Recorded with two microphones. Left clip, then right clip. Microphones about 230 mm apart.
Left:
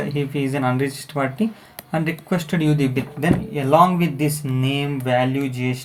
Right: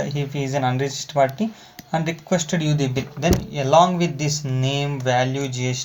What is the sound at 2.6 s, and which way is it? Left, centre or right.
Speech, right.